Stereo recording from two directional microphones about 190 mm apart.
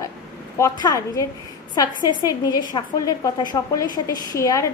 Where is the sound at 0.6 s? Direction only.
20° left (ahead or behind).